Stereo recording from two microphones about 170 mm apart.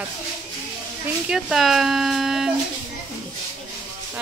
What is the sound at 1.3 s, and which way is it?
Speech, centre (ahead or behind).